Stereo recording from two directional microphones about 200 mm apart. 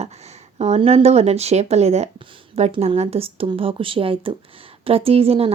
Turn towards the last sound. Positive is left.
turn(degrees=-30)  # may be behind; listen again after turning